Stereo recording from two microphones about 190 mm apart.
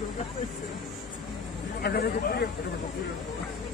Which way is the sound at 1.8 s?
55° left (ahead or behind).